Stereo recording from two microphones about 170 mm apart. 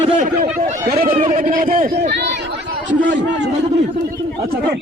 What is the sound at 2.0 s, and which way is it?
Chatter, 75° right (ahead or behind).